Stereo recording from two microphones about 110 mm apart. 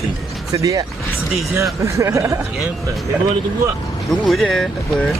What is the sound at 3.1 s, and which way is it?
Speech, 10° right (ahead or behind).